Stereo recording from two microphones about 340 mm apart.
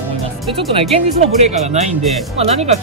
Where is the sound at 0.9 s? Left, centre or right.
Centre.